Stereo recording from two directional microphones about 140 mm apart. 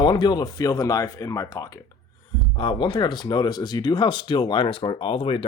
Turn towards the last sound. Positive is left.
turn(degrees=40)  # may be behind; listen again after turning